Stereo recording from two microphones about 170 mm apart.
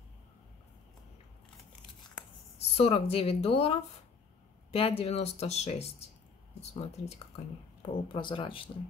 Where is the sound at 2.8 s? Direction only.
35° left (ahead or behind).